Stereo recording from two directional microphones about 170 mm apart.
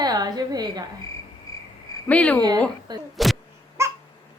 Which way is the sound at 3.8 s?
15° right (ahead or behind).